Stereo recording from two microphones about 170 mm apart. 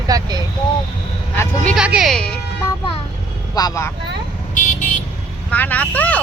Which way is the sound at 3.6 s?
20° left (ahead or behind).